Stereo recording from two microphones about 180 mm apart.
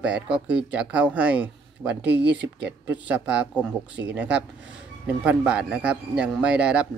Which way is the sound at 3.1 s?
5° right (ahead or behind).